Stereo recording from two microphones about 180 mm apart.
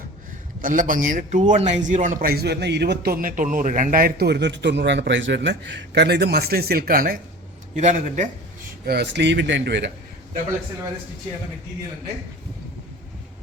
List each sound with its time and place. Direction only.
0.6 s a man's voice: 50° right (ahead or behind)
7.8 s a man's voice: 40° right (ahead or behind)
8.9 s speech: 70° right (ahead or behind)